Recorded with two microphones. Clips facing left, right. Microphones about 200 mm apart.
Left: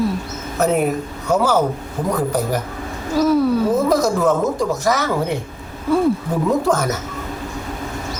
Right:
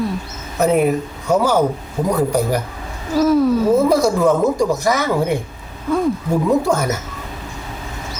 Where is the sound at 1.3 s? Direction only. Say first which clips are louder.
Right 1 dB; 15° right (ahead or behind).